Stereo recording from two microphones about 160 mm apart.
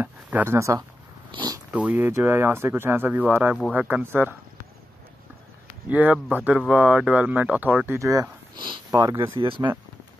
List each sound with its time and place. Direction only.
0.0 s speech: 10° right (ahead or behind)
1.3 s a sound: 25° right (ahead or behind)
1.7 s speech: 10° right (ahead or behind)
5.9 s speech: 10° right (ahead or behind); by 9.7 s 30° right (ahead or behind)